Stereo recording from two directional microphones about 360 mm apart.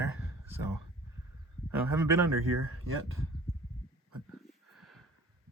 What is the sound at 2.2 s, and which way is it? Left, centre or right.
Speech, right.